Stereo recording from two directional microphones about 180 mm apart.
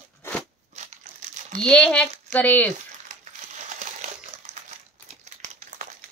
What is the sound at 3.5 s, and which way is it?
Crumpling, 40° right (ahead or behind).